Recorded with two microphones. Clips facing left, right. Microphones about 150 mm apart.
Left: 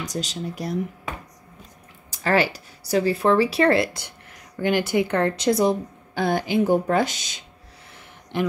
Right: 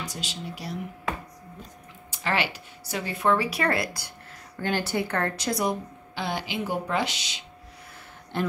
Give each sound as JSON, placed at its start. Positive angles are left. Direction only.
{"t": 0.0, "sound": "speech", "side_deg": 40}
{"t": 2.0, "sound": "a woman's voice", "side_deg": 40}
{"t": 6.1, "sound": "speech", "side_deg": 45}